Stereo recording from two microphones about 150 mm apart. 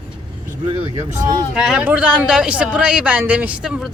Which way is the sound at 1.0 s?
20° right (ahead or behind).